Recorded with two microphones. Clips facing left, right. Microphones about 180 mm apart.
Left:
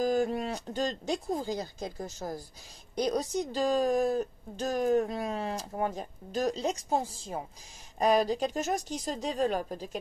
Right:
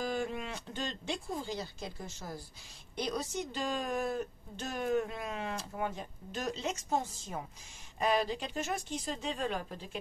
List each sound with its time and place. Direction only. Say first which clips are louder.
0.0 s speech: left 8 dB; 40° left (ahead or behind)